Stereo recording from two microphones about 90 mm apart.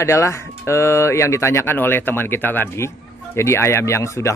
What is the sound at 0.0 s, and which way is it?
Speech, 30° left (ahead or behind).